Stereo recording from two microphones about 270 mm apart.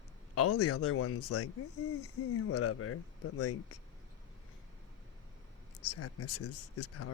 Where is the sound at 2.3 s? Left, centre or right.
Left.